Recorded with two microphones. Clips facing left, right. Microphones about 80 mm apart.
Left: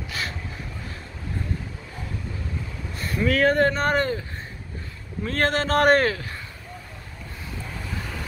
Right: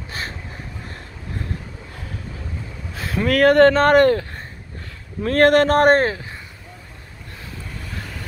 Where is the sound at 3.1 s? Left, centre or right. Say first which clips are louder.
Right 5 dB; right.